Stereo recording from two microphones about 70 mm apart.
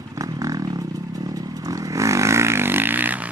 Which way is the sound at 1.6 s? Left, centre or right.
Right.